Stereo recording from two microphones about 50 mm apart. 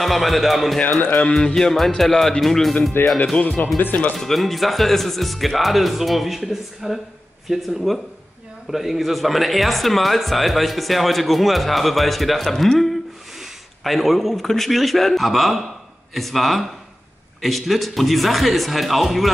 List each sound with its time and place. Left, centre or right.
0.0 s a man's voice: centre
1.3 s a man's voice: centre
3.0 s speech: left
4.2 s a man's voice: centre